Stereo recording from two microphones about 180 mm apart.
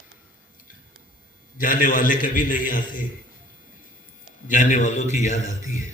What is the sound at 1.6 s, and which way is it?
A man's voice, 50° left (ahead or behind).